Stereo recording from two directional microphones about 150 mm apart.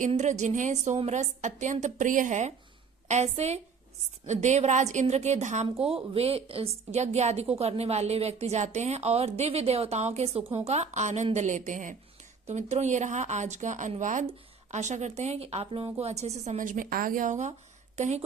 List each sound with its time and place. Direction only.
0.1 s a woman's voice: 50° right (ahead or behind)
12.5 s a woman's voice: 50° right (ahead or behind)